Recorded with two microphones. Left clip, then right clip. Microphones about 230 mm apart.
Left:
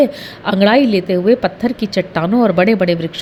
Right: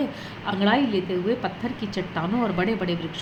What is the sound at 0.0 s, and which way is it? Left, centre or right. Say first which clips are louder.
A woman's voice: left 14 dB; left.